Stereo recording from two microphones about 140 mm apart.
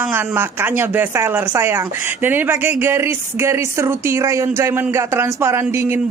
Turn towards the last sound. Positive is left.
turn(degrees=-20)  # may be behind; listen again after turning